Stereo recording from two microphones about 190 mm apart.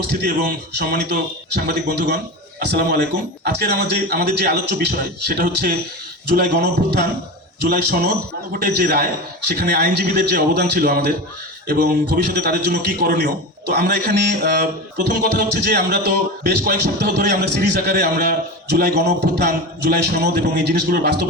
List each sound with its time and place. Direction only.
0.3 s a man's voice: 50° right (ahead or behind)